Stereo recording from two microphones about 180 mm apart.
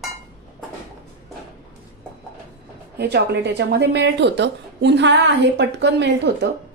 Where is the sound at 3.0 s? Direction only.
65° right (ahead or behind).